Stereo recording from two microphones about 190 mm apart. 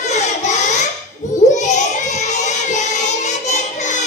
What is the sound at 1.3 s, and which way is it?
Child singing, 40° left (ahead or behind).